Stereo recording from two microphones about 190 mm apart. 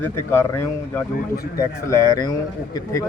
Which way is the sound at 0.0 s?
15° left (ahead or behind).